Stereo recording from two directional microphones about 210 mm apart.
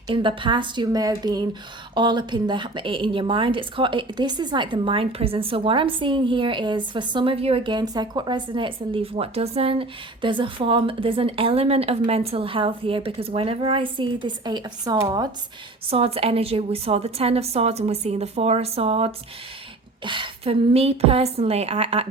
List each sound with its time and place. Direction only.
0.1 s a woman's voice: 25° right (ahead or behind)